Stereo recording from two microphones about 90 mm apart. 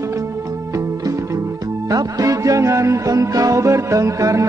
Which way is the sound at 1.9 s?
40° right (ahead or behind).